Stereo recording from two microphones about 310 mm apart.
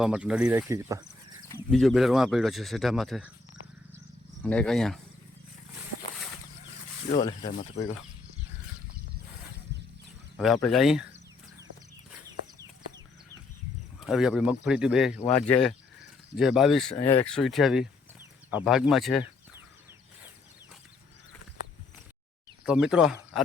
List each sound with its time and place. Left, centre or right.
0.0 s a man's voice: centre
4.4 s a man's voice: centre
7.1 s speech: centre
10.3 s speech: centre
14.0 s a man's voice: centre
22.6 s speech: centre